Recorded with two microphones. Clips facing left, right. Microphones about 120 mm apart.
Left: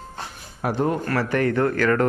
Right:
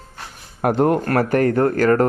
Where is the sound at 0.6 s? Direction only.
60° right (ahead or behind); by 2.1 s 40° right (ahead or behind).